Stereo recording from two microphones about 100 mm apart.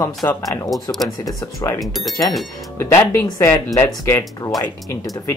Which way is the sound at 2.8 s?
30° left (ahead or behind).